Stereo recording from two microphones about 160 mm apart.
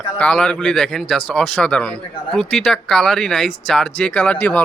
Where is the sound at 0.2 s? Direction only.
5° left (ahead or behind).